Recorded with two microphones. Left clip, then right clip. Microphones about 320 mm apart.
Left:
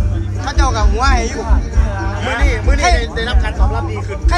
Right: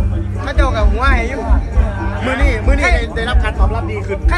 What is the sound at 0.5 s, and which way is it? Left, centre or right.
Music, centre.